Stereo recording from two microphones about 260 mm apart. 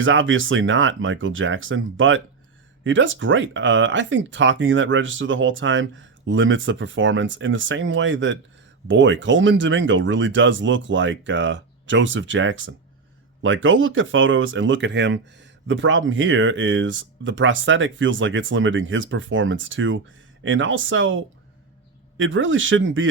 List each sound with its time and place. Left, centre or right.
0.0 s speech: right